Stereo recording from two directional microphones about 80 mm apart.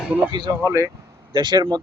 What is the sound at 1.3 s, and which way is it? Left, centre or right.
Speech, right.